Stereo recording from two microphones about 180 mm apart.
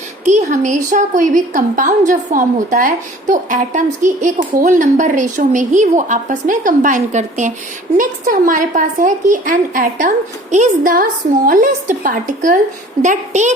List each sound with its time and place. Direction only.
0.3 s a woman's voice: 40° right (ahead or behind)